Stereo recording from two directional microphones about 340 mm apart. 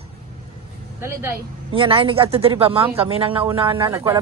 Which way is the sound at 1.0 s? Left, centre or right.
Centre.